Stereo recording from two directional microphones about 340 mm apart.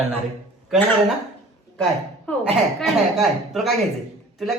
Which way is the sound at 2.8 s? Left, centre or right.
Centre.